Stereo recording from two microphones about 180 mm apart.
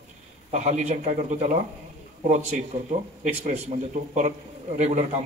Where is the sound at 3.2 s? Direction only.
40° right (ahead or behind).